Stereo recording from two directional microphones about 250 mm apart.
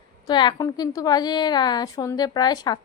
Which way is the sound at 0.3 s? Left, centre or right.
Centre.